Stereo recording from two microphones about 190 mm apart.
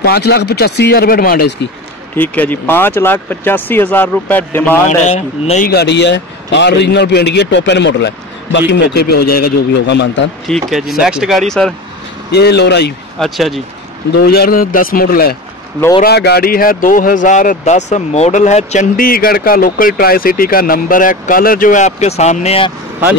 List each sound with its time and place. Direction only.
0.0 s a man's voice: 55° left (ahead or behind)
2.1 s speech: 10° left (ahead or behind)
4.8 s speech: 35° left (ahead or behind)
5.7 s a man's voice: 60° left (ahead or behind)
10.7 s speech: centre (ahead or behind)
12.3 s a man's voice: 60° left (ahead or behind)
13.2 s speech: centre (ahead or behind)
14.1 s a man's voice: 55° left (ahead or behind); by 22.7 s 35° left (ahead or behind)